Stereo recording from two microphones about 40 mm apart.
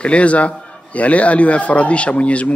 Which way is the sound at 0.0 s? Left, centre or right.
Left.